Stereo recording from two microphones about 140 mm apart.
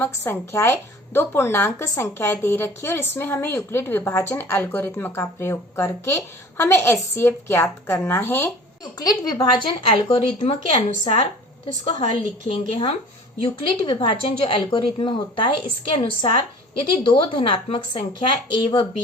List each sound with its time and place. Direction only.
0.0 s a woman's voice: 15° left (ahead or behind)
8.8 s a woman's voice: 30° left (ahead or behind)